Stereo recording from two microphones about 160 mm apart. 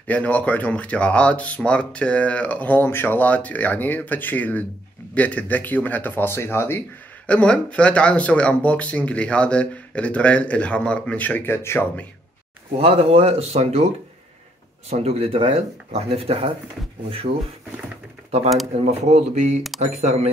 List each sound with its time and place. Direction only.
0.0 s speech: 10° left (ahead or behind)
12.8 s speech: 40° right (ahead or behind)
14.9 s speech: 40° right (ahead or behind)
17.3 s speech: 90° right
18.8 s speech: 45° right (ahead or behind)